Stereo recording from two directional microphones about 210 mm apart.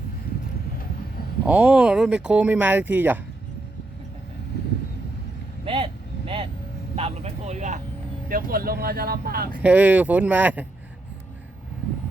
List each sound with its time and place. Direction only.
1.5 s speech: 5° right (ahead or behind)
5.6 s vehicle: 25° right (ahead or behind)
8.3 s speech: 45° right (ahead or behind)
9.6 s speech: 5° right (ahead or behind)